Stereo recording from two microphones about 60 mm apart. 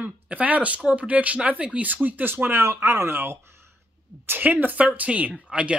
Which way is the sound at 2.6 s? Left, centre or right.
Right.